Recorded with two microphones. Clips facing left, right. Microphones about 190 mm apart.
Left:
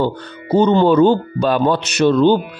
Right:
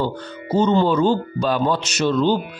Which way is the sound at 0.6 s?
60° left (ahead or behind).